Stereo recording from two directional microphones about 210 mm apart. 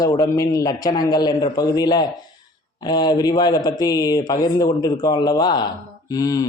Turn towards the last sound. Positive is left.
turn(degrees=15)  # may be behind; listen again after turning